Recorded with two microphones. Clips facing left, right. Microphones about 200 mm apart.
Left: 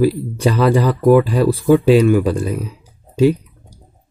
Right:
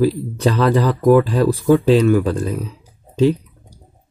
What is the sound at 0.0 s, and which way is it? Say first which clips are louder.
Speech: left 1 dB; 10° left (ahead or behind).